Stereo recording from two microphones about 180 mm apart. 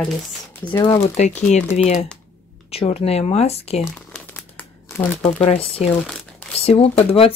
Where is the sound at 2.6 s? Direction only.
35° left (ahead or behind).